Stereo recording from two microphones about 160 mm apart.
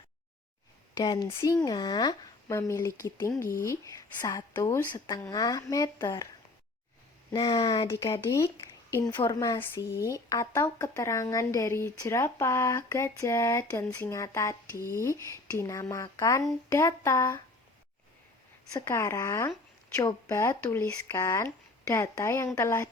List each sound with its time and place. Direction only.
0.9 s speech: 25° left (ahead or behind)
7.3 s a woman's voice: 20° left (ahead or behind)
9.1 s speech: 25° left (ahead or behind)
18.7 s speech: 20° left (ahead or behind)